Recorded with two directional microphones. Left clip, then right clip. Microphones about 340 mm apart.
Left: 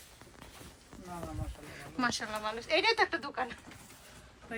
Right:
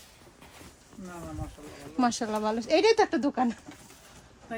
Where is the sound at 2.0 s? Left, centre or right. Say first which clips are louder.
Right 6 dB; centre.